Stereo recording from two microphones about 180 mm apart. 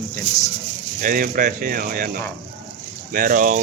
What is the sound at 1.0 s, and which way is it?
Speech, 50° right (ahead or behind).